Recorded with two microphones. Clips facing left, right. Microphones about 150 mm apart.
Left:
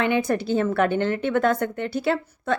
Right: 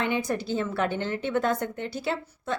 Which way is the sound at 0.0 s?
65° left (ahead or behind).